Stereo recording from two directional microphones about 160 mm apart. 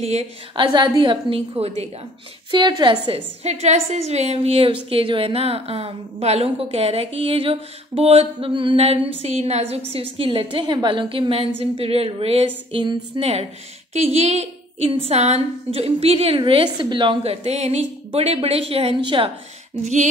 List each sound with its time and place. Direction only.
0.0 s a woman's voice: 40° right (ahead or behind)
0.7 s a woman's voice: 30° right (ahead or behind)
3.4 s a woman's voice: 45° right (ahead or behind)
19.8 s a sound: 50° right (ahead or behind)